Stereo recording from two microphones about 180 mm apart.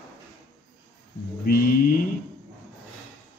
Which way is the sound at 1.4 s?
50° left (ahead or behind).